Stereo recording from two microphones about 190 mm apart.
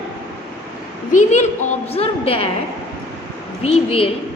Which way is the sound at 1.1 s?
40° left (ahead or behind).